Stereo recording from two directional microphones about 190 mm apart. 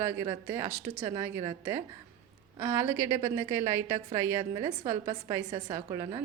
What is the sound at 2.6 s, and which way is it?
A woman's voice, 10° right (ahead or behind).